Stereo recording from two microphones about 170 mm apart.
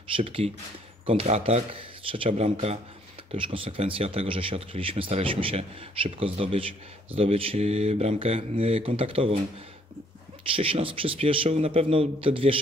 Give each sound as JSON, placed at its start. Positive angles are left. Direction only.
{"t": 0.1, "sound": "speech", "side_deg": -35}
{"t": 10.5, "sound": "speech", "side_deg": -30}